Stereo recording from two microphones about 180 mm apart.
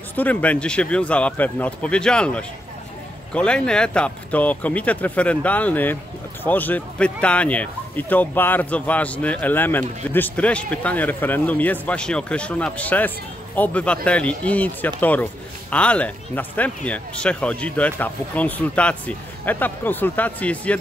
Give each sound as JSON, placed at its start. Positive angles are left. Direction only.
{"t": 0.1, "sound": "speech", "side_deg": 10}